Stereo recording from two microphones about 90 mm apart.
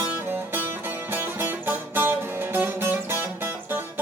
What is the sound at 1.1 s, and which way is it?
Music, 25° right (ahead or behind).